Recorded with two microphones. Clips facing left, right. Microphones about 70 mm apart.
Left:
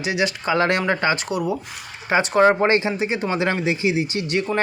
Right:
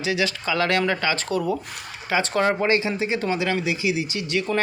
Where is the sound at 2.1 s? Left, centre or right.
Left.